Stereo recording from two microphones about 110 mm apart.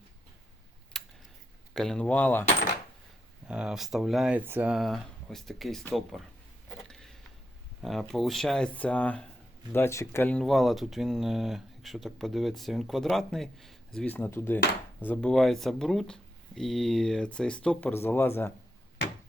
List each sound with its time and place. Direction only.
0.9 s a sound: 5° left (ahead or behind)
1.7 s speech: 5° left (ahead or behind)
3.4 s speech: 10° right (ahead or behind)
4.4 s speech: 15° right (ahead or behind)
4.7 s speech: centre (ahead or behind)
6.8 s a sound: 5° left (ahead or behind)
7.8 s speech: centre (ahead or behind)
9.7 s speech: 25° left (ahead or behind)
10.3 s speech: centre (ahead or behind)
14.1 s speech: 20° left (ahead or behind)
15.3 s speech: centre (ahead or behind)
17.9 s speech: 20° left (ahead or behind)